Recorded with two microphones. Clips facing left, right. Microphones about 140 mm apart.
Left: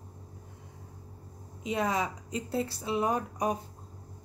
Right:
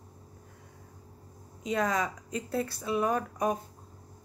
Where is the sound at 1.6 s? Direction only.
20° left (ahead or behind).